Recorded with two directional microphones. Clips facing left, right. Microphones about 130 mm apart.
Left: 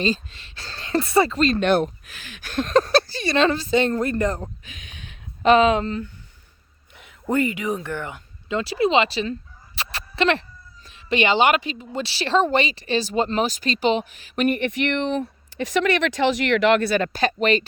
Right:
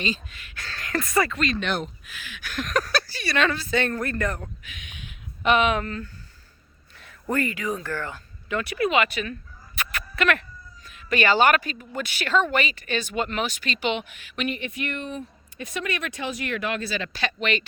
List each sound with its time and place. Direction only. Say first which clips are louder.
0.0 s a woman's voice: left 6 dB; 35° left (ahead or behind)
1.5 s speech: left 9 dB; 50° left (ahead or behind)
2.6 s speech: left 8 dB; 30° left (ahead or behind)
9.7 s fowl: left 3 dB; 30° left (ahead or behind)
10.8 s a woman's voice: left 2 dB; 25° left (ahead or behind); by 14.6 s 45° left (ahead or behind)
14.6 s speech: left 9 dB; 85° left; by 17.6 s 40° left (ahead or behind)